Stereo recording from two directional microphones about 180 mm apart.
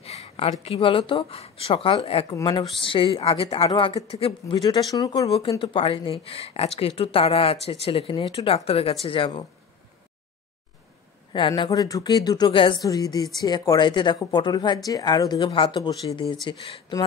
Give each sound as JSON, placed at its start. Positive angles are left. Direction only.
{"t": 0.0, "sound": "speech", "side_deg": 35}
{"t": 5.6, "sound": "speech", "side_deg": 30}
{"t": 11.3, "sound": "speech", "side_deg": 25}